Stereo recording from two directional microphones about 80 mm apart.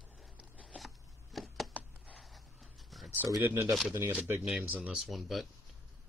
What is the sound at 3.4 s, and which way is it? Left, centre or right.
Speech, right.